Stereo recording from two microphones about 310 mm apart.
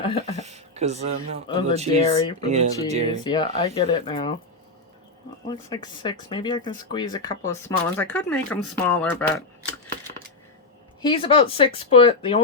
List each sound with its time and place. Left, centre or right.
0.0 s speech: centre
0.4 s speech: right
3.2 s speech: centre
5.5 s speech: centre
11.0 s speech: centre